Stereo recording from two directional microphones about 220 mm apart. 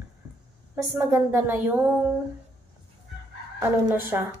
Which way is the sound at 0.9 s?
10° right (ahead or behind).